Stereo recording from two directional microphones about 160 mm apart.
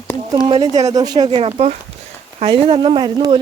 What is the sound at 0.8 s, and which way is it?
Speech, 25° right (ahead or behind).